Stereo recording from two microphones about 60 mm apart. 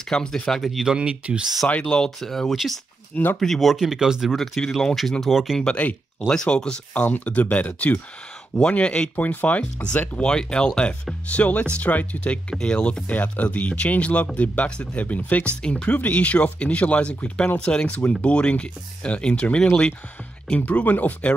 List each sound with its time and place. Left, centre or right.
0.1 s speech: centre
0.9 s speech: centre
1.7 s speech: centre
2.0 s speech: centre
3.7 s speech: centre
4.4 s speech: centre
5.8 s speech: left
6.3 s speech: centre
7.0 s speech: left
9.1 s speech: left